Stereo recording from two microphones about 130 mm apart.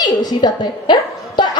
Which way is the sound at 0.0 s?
30° left (ahead or behind).